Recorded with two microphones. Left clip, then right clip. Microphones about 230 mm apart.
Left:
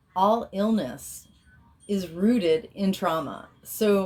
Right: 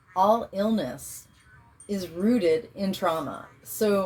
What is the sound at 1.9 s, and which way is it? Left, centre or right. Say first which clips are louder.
Speech: left 1 dB; left.